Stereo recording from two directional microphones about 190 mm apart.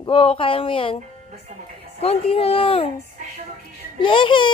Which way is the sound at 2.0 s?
30° left (ahead or behind).